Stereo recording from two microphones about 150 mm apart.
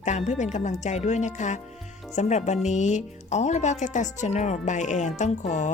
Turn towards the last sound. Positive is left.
turn(degrees=50)  # may be behind; listen again after turning